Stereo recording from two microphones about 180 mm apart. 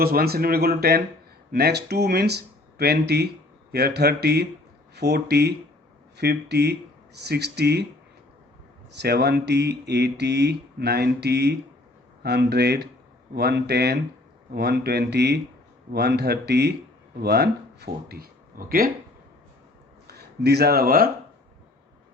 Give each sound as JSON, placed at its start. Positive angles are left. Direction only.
{"t": 0.0, "sound": "speech", "side_deg": -60}
{"t": 8.9, "sound": "speech", "side_deg": -65}
{"t": 20.1, "sound": "speech", "side_deg": -65}